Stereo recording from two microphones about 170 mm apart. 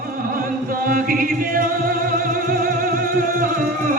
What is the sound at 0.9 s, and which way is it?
Music, 55° right (ahead or behind).